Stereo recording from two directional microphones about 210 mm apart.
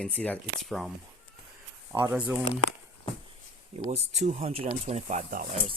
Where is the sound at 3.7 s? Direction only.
30° right (ahead or behind).